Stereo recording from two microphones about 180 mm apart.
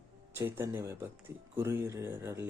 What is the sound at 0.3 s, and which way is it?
Speech, 10° right (ahead or behind).